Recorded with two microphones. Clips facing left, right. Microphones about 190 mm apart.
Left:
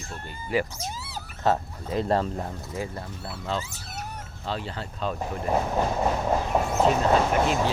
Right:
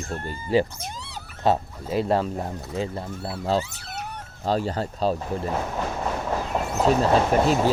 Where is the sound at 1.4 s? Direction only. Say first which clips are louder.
Right 2 dB; 15° right (ahead or behind).